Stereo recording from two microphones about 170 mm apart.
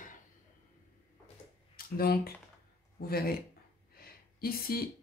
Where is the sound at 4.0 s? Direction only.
60° left (ahead or behind).